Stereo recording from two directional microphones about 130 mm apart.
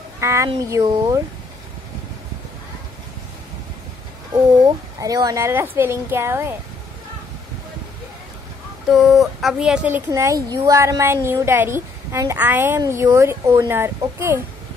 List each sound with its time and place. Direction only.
0.2 s speech: 20° right (ahead or behind)
4.3 s speech: 30° right (ahead or behind)
8.8 s speech: centre (ahead or behind); by 14.4 s 20° right (ahead or behind)